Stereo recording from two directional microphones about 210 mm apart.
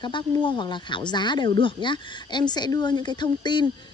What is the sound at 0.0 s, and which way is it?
A woman's voice, 20° left (ahead or behind).